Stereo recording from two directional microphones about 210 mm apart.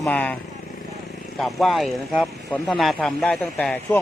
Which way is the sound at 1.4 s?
Centre (ahead or behind).